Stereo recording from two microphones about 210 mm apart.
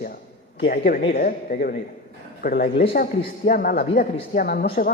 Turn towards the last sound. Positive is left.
turn(degrees=45)  # may be behind; listen again after turning